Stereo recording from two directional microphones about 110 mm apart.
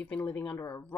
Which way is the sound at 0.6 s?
25° left (ahead or behind).